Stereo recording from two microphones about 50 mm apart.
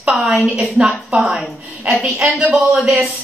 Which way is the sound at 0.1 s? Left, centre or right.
Centre.